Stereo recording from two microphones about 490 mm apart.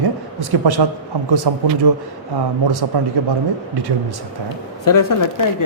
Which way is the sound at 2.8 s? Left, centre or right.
Right.